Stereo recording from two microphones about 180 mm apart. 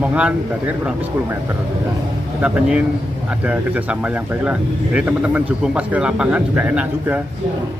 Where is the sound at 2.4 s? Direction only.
5° right (ahead or behind).